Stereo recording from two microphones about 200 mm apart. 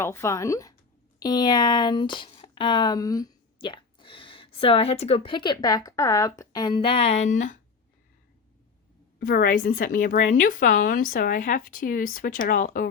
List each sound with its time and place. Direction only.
0.0 s a woman's voice: 15° left (ahead or behind); by 7.6 s 40° left (ahead or behind)
9.1 s a woman's voice: 45° left (ahead or behind)